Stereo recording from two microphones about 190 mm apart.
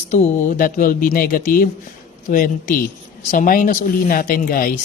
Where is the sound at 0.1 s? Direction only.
40° left (ahead or behind).